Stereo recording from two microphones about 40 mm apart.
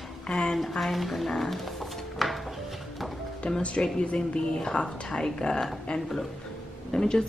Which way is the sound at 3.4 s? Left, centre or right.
Left.